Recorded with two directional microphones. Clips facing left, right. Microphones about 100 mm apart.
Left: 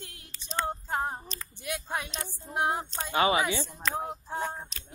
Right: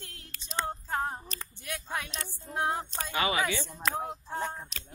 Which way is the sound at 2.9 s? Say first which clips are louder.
Left 5 dB; 30° left (ahead or behind).